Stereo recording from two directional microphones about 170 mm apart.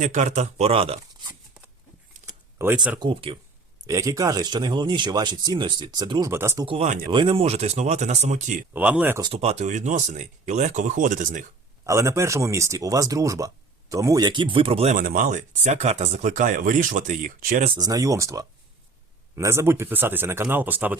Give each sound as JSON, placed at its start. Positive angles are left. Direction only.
{"t": 0.0, "sound": "speech", "side_deg": -45}
{"t": 2.6, "sound": "speech", "side_deg": -10}
{"t": 3.0, "sound": "speech", "side_deg": -30}
{"t": 3.8, "sound": "speech", "side_deg": -20}
{"t": 6.7, "sound": "speech", "side_deg": -35}
{"t": 8.7, "sound": "speech", "side_deg": -10}
{"t": 9.2, "sound": "speech", "side_deg": -35}
{"t": 11.9, "sound": "speech", "side_deg": -15}
{"t": 14.9, "sound": "speech", "side_deg": -55}
{"t": 17.7, "sound": "speech", "side_deg": -20}